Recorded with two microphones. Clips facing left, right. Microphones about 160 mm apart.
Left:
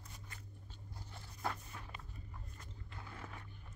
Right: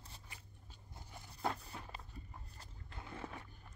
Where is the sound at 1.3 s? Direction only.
30° right (ahead or behind).